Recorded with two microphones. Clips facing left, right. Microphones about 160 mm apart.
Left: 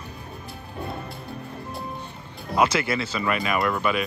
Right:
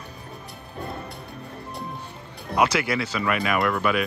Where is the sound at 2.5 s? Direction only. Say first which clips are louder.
Even; 15° right (ahead or behind).